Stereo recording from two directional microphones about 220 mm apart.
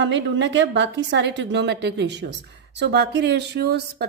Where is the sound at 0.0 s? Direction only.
55° right (ahead or behind).